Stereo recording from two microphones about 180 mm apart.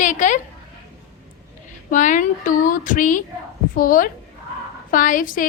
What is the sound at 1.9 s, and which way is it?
A woman's voice, 45° left (ahead or behind).